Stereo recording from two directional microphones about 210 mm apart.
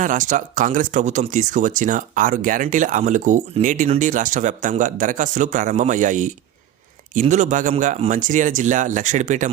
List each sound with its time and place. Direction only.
0.0 s speech: 40° right (ahead or behind)